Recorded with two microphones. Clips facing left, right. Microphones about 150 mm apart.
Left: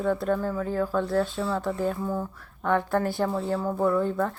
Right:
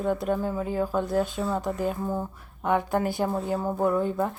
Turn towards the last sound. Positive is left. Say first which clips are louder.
# even
turn(degrees=-10)  # may be behind; listen again after turning